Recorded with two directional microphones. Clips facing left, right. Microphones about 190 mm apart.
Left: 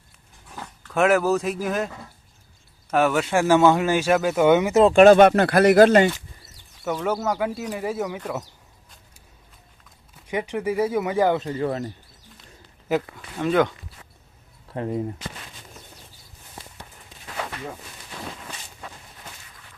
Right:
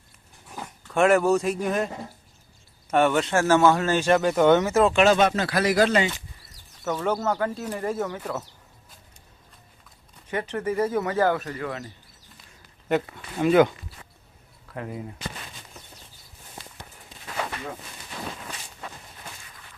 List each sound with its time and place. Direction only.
0.5 s dog: 10° right (ahead or behind)
0.9 s speech: centre (ahead or behind)
2.9 s speech: centre (ahead or behind)
4.7 s speech: 25° left (ahead or behind)
4.9 s speech: 55° left (ahead or behind)
6.8 s speech: 5° left (ahead or behind)
10.2 s speech: 10° left (ahead or behind); by 11.8 s 30° left (ahead or behind)
12.9 s speech: 5° right (ahead or behind)
14.7 s speech: 30° left (ahead or behind)